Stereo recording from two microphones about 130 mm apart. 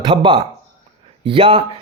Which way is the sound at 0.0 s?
40° right (ahead or behind).